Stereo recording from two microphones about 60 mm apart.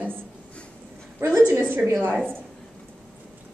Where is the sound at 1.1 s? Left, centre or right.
Right.